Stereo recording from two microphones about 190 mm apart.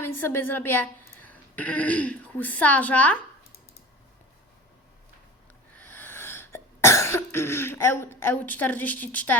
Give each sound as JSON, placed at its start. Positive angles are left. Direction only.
{"t": 0.0, "sound": "a woman's voice", "side_deg": 10}
{"t": 5.7, "sound": "cough", "side_deg": 10}